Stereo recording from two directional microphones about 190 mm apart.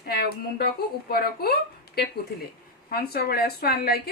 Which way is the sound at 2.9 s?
55° left (ahead or behind).